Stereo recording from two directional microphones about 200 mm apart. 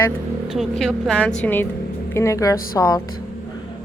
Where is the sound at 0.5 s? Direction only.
Centre (ahead or behind); by 3.0 s 20° left (ahead or behind).